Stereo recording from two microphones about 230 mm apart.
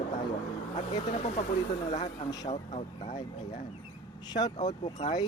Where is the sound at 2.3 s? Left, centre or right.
Centre.